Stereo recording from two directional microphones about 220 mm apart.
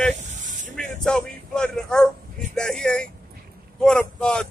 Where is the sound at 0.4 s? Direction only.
35° right (ahead or behind).